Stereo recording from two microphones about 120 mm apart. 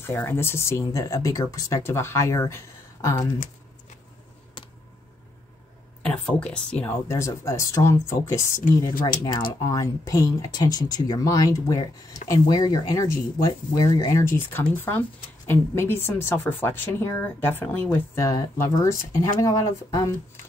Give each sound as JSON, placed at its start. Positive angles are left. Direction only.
{"t": 0.0, "sound": "speech", "side_deg": 20}
{"t": 6.0, "sound": "speech", "side_deg": 10}
{"t": 6.9, "sound": "speech", "side_deg": 25}
{"t": 14.2, "sound": "speech", "side_deg": 20}
{"t": 18.2, "sound": "speech", "side_deg": 25}